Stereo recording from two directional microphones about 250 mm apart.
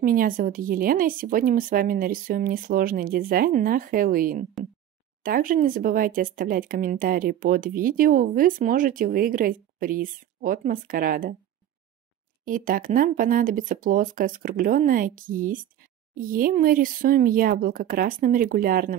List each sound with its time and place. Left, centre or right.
0.0 s speech: right
12.4 s speech: right